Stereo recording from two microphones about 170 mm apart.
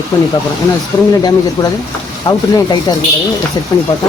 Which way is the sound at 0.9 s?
25° left (ahead or behind).